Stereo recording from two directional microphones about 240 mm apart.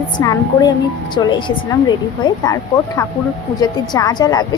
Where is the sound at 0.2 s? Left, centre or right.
Centre.